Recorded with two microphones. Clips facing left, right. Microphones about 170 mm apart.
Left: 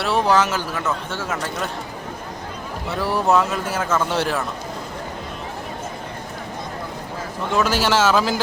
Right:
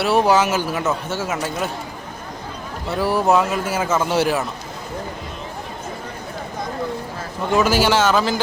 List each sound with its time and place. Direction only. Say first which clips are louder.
0.0 s a man's voice: right 2 dB; 10° right (ahead or behind)
2.9 s a man's voice: right 2 dB; centre (ahead or behind)
7.5 s a man's voice: right 3 dB; centre (ahead or behind)